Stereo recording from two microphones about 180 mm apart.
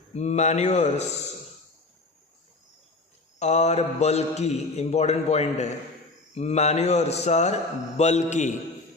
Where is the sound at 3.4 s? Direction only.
40° left (ahead or behind).